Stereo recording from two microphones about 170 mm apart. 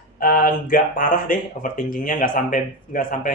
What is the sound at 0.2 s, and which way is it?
Speech, 55° left (ahead or behind).